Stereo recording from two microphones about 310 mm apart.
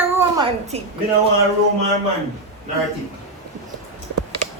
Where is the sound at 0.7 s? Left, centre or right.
Right.